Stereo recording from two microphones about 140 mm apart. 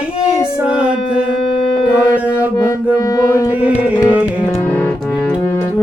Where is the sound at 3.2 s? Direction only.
25° left (ahead or behind).